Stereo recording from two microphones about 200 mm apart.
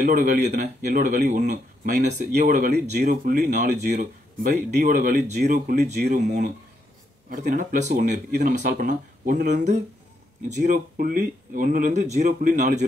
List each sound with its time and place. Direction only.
0.0 s speech: 45° right (ahead or behind)